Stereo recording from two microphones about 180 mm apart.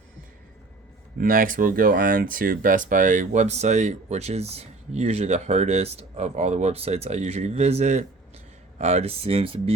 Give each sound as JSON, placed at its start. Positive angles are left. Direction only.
{"t": 1.2, "sound": "speech", "side_deg": -50}